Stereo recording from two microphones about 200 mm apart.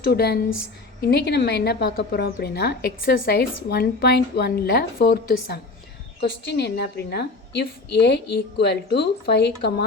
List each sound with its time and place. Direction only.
0.1 s a woman's voice: 50° left (ahead or behind)